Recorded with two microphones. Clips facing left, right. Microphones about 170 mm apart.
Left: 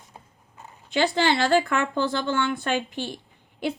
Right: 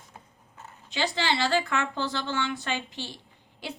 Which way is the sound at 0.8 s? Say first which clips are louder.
Left 6 dB; 55° left (ahead or behind).